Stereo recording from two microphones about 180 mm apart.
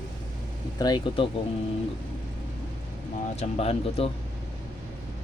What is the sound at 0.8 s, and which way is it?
Speech, 25° left (ahead or behind).